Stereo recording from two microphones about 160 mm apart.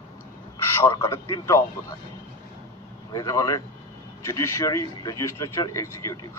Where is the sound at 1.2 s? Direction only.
25° left (ahead or behind).